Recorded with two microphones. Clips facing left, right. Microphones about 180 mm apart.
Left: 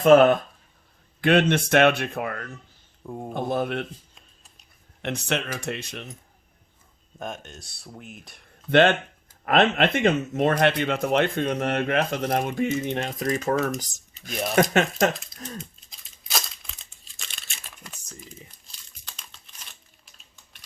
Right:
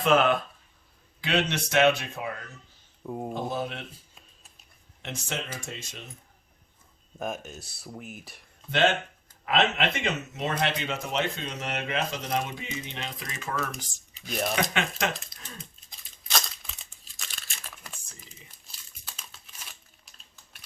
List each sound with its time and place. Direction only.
0.0 s speech: 45° left (ahead or behind)
5.0 s speech: 65° left (ahead or behind)
7.2 s speech: 5° right (ahead or behind)
8.7 s speech: 60° left (ahead or behind); by 15.1 s 45° left (ahead or behind)
16.3 s a sound: centre (ahead or behind)
18.7 s crumpling: 5° right (ahead or behind)